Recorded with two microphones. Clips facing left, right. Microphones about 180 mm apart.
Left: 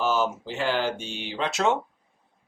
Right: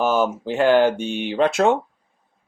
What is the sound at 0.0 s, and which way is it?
Speech, 55° right (ahead or behind).